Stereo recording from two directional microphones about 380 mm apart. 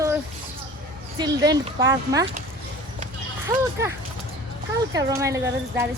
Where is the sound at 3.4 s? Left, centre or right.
Centre.